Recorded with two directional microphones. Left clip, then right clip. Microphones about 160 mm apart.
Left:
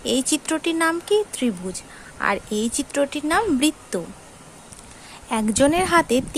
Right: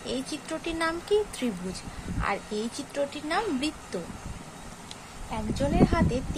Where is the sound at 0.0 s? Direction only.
50° left (ahead or behind).